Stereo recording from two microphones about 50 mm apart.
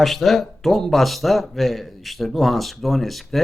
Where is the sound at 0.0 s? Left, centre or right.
Centre.